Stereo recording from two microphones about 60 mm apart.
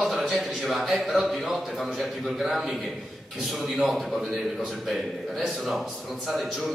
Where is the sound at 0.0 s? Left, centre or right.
Centre.